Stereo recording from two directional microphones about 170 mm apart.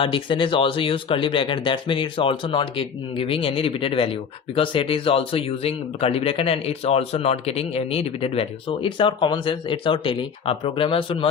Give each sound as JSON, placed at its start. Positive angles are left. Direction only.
{"t": 0.0, "sound": "speech", "side_deg": 30}